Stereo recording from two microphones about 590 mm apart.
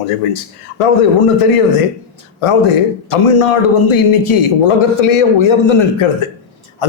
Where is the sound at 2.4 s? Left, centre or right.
Left.